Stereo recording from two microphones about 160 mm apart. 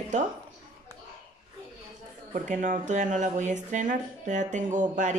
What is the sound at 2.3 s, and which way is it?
Speech, 50° right (ahead or behind).